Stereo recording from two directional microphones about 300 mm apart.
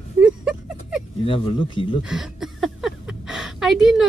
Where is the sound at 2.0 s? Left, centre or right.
Centre.